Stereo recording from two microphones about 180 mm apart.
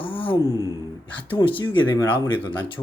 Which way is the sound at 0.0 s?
30° left (ahead or behind).